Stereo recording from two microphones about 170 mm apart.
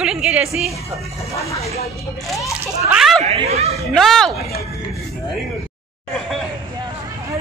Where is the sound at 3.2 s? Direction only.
35° right (ahead or behind).